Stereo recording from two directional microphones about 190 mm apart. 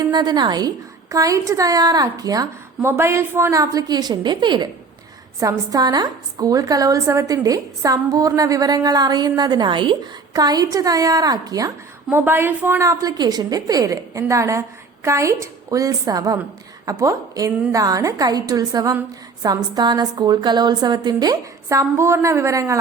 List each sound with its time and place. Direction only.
0.0 s a woman's voice: 20° right (ahead or behind)